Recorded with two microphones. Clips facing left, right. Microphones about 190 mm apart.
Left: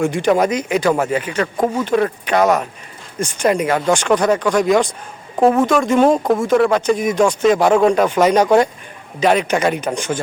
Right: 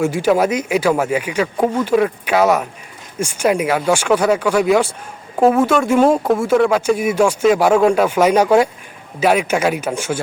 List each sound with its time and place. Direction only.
0.0 s speech: 5° right (ahead or behind)